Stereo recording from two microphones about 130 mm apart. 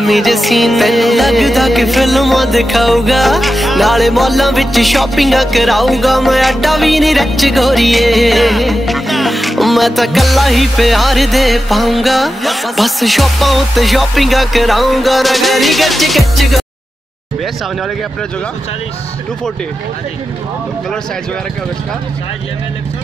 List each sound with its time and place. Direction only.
0.0 s music: centre (ahead or behind)